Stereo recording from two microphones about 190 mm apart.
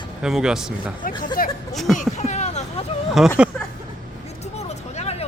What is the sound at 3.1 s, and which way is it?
Speech, 5° right (ahead or behind).